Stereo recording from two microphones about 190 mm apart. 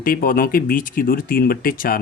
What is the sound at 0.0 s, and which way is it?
Speech, 50° left (ahead or behind).